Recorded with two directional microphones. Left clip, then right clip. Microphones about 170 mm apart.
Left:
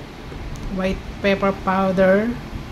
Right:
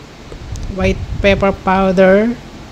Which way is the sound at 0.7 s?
40° right (ahead or behind).